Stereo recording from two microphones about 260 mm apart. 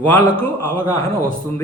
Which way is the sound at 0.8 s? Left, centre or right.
Centre.